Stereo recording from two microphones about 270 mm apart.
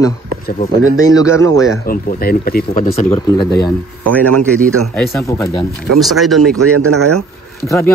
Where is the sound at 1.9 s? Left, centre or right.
Left.